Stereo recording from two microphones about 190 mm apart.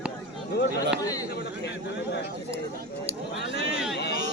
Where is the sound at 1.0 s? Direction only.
20° left (ahead or behind).